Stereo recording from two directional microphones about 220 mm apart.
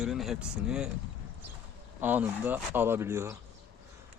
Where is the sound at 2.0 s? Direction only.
10° right (ahead or behind).